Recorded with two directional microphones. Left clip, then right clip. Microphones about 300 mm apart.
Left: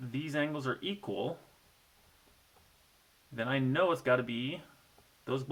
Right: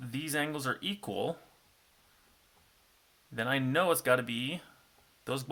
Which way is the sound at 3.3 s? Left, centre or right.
Right.